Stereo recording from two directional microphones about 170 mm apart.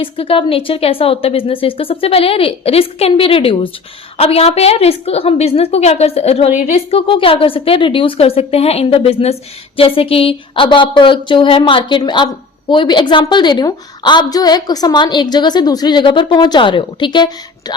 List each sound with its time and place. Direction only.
0.0 s a woman's voice: 30° left (ahead or behind)